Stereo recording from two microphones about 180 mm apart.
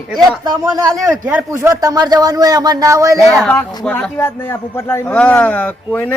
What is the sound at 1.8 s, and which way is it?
Speech, 20° right (ahead or behind).